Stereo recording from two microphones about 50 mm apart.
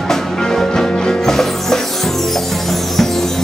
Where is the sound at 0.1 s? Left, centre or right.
Centre.